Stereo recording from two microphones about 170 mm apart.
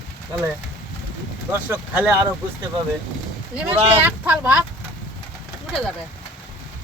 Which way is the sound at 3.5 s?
10° right (ahead or behind).